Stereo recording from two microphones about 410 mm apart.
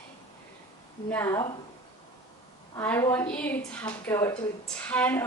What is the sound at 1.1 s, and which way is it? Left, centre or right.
Speech, centre.